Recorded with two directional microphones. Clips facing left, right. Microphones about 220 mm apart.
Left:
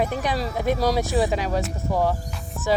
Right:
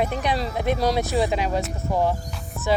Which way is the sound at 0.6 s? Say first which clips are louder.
Left 1 dB; 45° left (ahead or behind).